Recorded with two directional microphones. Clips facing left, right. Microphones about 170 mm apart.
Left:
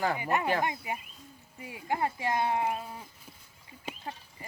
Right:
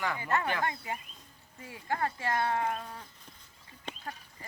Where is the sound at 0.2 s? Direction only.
15° left (ahead or behind).